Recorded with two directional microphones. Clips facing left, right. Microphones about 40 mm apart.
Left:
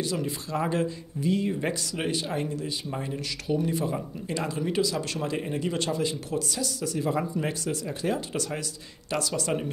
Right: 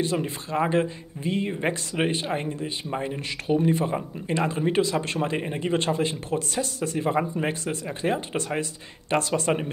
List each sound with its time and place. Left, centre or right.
0.0 s speech: right